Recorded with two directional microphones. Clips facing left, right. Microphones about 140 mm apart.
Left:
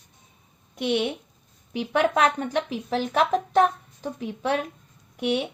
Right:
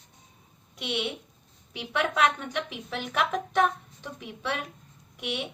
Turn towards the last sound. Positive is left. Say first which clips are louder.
# left 9 dB
turn(degrees=40)  # may be behind; listen again after turning